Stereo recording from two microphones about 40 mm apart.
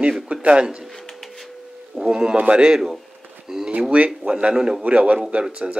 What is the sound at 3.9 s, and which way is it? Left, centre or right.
Speech, right.